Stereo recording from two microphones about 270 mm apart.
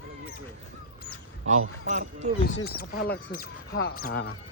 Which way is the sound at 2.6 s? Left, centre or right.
Left.